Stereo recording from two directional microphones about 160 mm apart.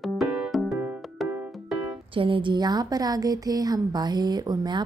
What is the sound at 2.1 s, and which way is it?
A woman's voice, 35° right (ahead or behind).